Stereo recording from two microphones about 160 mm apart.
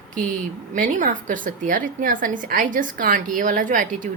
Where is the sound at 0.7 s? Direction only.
55° right (ahead or behind).